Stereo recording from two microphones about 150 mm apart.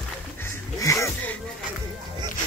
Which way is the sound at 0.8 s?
20° left (ahead or behind).